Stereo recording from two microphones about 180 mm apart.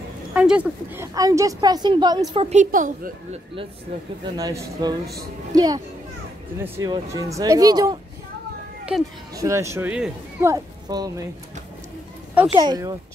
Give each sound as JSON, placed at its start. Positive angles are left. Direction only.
{"t": 0.3, "sound": "a woman's voice", "side_deg": -5}
{"t": 2.5, "sound": "a woman's voice", "side_deg": -45}
{"t": 4.4, "sound": "a woman's voice", "side_deg": -20}
{"t": 8.9, "sound": "speech", "side_deg": -5}
{"t": 9.3, "sound": "a man's voice", "side_deg": -15}
{"t": 10.4, "sound": "speech", "side_deg": -20}
{"t": 12.5, "sound": "a woman's voice", "side_deg": -20}